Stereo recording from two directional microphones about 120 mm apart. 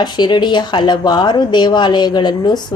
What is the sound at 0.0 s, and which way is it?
Speech, 40° left (ahead or behind).